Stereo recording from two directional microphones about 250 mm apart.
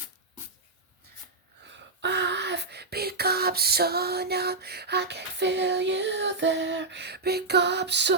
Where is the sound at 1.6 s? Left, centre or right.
Right.